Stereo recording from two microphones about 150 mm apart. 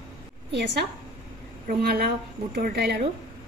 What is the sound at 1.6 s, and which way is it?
A woman's voice, 90° right.